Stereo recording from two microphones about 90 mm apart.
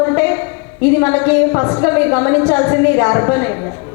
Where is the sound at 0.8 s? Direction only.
25° left (ahead or behind).